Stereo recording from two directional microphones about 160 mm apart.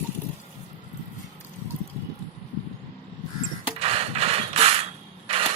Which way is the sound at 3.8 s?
40° right (ahead or behind).